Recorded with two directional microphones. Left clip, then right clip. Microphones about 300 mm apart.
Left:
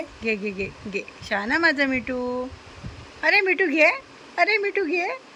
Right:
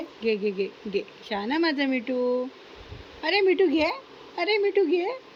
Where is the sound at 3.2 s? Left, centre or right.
Left.